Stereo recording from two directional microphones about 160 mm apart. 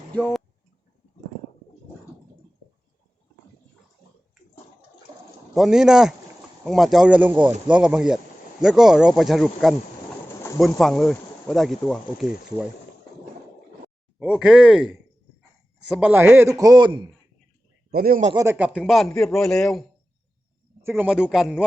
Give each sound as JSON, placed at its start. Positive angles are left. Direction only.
{"t": 5.5, "sound": "speech", "side_deg": -5}
{"t": 14.2, "sound": "speech", "side_deg": -5}
{"t": 15.9, "sound": "a man's voice", "side_deg": -5}
{"t": 17.9, "sound": "a man's voice", "side_deg": -70}
{"t": 18.5, "sound": "speech", "side_deg": -5}
{"t": 20.8, "sound": "speech", "side_deg": -10}